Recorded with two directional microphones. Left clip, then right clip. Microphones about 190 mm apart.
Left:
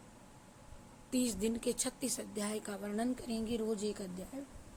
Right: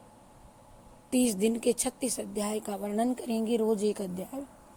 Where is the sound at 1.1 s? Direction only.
30° right (ahead or behind).